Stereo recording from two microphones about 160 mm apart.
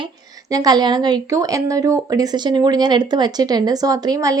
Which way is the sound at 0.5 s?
25° right (ahead or behind).